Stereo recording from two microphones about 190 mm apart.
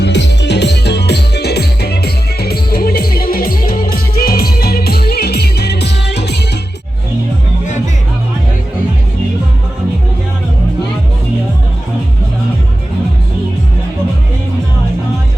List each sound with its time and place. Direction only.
0.0 s music: 65° left (ahead or behind)